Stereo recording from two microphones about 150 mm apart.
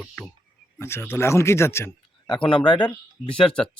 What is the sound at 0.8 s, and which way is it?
A man's voice, 15° left (ahead or behind).